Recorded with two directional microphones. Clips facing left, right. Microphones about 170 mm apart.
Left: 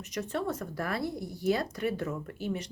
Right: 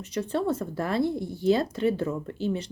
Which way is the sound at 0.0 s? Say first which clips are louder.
Right 5 dB; 30° right (ahead or behind).